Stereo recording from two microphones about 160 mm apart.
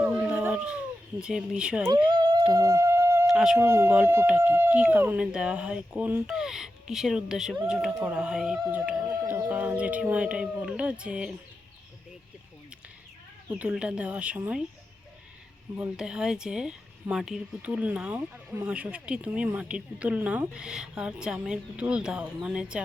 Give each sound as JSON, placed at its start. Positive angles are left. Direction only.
{"t": 0.0, "sound": "a sound", "side_deg": -10}
{"t": 2.0, "sound": "music", "side_deg": -30}
{"t": 3.2, "sound": "speech", "side_deg": -5}
{"t": 3.6, "sound": "speech", "side_deg": -15}
{"t": 9.0, "sound": "speech", "side_deg": -15}
{"t": 13.5, "sound": "speech", "side_deg": -10}
{"t": 15.8, "sound": "speech", "side_deg": -5}